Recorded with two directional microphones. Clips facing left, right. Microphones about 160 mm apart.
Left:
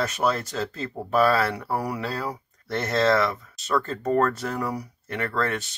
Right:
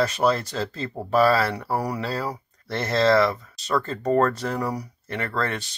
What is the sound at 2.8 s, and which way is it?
Speech, 30° right (ahead or behind).